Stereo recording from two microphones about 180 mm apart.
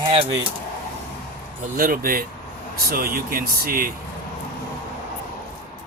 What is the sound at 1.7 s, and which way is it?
Speech, 55° right (ahead or behind).